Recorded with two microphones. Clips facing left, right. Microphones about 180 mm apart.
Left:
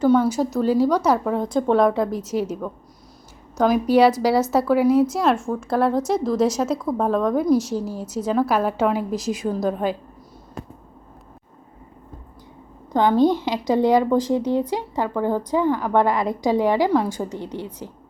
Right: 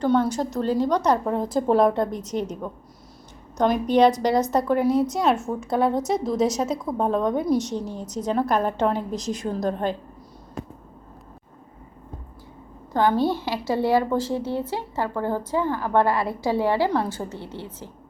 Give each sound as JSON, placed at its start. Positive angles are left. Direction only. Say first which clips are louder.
{"t": 0.0, "sound": "a woman's voice", "louder": "left 4 dB", "side_deg": 5}
{"t": 3.6, "sound": "a woman's voice", "louder": "left 2 dB", "side_deg": 5}
{"t": 12.9, "sound": "a woman's voice", "louder": "left 4 dB", "side_deg": 20}